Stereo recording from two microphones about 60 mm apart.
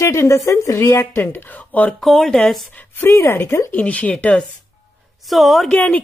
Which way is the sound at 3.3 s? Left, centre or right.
Left.